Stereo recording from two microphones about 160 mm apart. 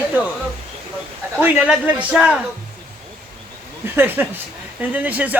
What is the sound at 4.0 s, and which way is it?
A woman's voice, 10° right (ahead or behind).